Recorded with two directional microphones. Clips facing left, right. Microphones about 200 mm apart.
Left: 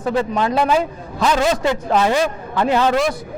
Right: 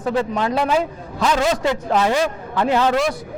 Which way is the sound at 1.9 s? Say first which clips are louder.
Left 2 dB; 25° left (ahead or behind).